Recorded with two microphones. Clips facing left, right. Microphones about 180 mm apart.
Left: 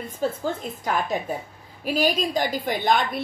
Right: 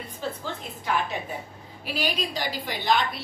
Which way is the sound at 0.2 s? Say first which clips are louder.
Left 7 dB; 45° left (ahead or behind).